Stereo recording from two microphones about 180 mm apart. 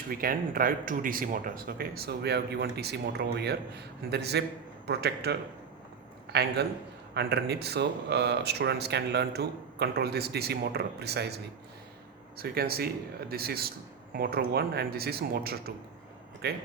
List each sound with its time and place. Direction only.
0.1 s speech: 55° right (ahead or behind)
7.1 s speech: 65° right (ahead or behind)
12.4 s speech: 60° right (ahead or behind)